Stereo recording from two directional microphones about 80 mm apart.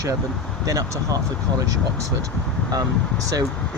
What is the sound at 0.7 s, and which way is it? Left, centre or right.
Speech, right.